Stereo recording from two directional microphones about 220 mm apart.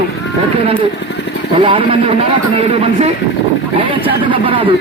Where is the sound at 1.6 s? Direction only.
25° right (ahead or behind).